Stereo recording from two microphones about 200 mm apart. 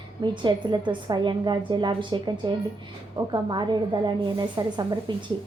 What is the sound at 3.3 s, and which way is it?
A woman's voice, 20° right (ahead or behind).